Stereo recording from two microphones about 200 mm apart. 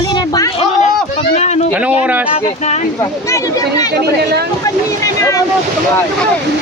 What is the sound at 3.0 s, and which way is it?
Speech, 15° left (ahead or behind).